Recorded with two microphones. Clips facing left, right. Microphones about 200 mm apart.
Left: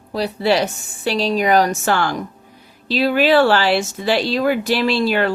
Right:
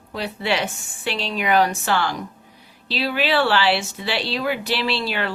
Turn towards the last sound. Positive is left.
turn(degrees=45)  # may be behind; listen again after turning